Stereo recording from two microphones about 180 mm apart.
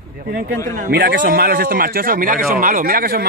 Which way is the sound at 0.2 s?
55° right (ahead or behind).